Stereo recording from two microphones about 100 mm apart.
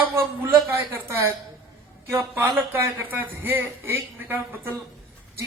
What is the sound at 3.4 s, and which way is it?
Speech, 20° right (ahead or behind).